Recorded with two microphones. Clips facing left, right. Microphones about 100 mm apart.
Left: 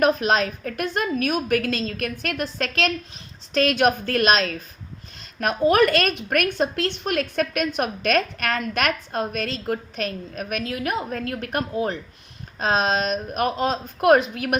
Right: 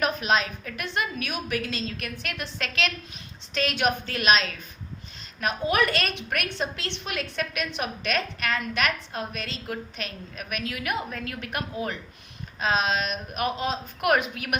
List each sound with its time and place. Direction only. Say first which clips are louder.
0.0 s a woman's voice: left 5 dB; 40° left (ahead or behind)